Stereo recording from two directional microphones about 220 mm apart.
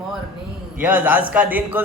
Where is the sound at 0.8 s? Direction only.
5° right (ahead or behind).